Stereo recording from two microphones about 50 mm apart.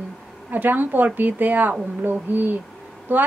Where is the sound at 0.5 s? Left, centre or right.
Right.